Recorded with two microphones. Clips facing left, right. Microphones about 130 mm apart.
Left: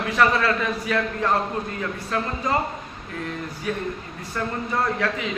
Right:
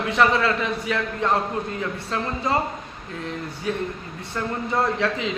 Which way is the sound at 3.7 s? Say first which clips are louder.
Right 1 dB; 25° right (ahead or behind).